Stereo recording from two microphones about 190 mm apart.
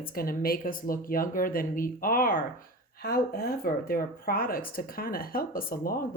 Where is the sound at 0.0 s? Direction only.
50° left (ahead or behind).